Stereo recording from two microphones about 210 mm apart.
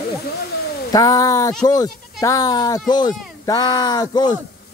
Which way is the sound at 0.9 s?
15° left (ahead or behind).